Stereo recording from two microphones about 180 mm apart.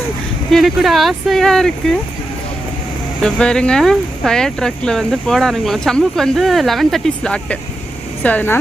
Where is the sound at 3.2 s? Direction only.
5° left (ahead or behind).